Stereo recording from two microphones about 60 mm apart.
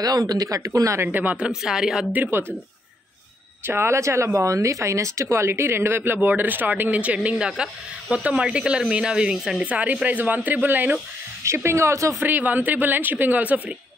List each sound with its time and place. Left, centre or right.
0.0 s speech: right
0.7 s speech: right
1.0 s speech: right
1.3 s a woman's voice: centre
2.3 s speech: right
3.6 s speech: right; by 9.7 s centre
9.7 s a woman's voice: right
11.4 s speech: right
12.2 s a woman's voice: right